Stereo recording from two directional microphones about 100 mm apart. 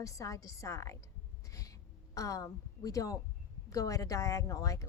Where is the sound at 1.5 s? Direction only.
35° left (ahead or behind).